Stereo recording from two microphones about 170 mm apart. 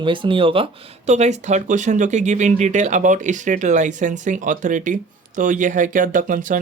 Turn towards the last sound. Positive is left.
turn(degrees=-50)  # may be behind; listen again after turning